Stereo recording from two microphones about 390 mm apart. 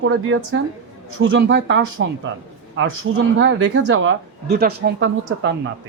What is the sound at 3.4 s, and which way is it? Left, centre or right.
Speech, right.